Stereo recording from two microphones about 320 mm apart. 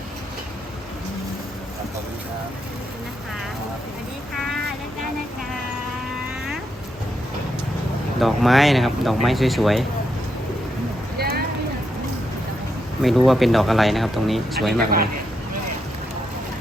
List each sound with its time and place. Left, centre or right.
8.2 s speech: centre
11.2 s a sound: right
13.0 s speech: centre